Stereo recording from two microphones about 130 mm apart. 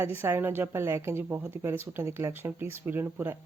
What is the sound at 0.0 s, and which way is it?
A woman's voice, 15° right (ahead or behind).